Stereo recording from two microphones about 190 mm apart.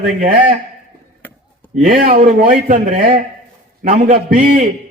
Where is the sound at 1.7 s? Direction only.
45° right (ahead or behind).